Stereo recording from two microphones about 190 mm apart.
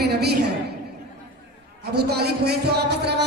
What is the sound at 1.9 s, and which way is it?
Speech, 55° right (ahead or behind).